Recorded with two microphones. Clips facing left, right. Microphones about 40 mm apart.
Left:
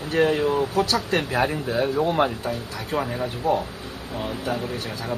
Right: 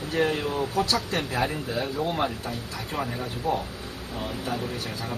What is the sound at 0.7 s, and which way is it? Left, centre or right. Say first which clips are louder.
Speech: left 4 dB; left.